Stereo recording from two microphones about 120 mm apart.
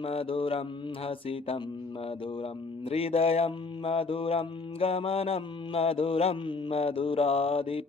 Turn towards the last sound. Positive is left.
turn(degrees=50)  # may be behind; listen again after turning